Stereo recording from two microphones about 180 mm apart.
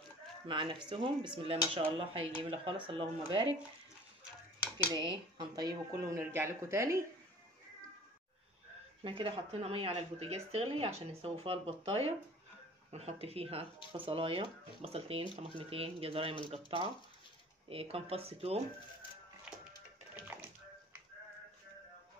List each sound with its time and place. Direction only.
0.5 s speech: 25° right (ahead or behind)
4.9 s speech: 25° right (ahead or behind)
5.9 s speech: 15° right (ahead or behind)
9.0 s speech: 30° right (ahead or behind)